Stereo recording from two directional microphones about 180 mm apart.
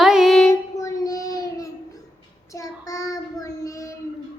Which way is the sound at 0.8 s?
20° left (ahead or behind).